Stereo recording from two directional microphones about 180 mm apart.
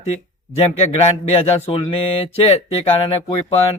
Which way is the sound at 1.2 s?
30° left (ahead or behind).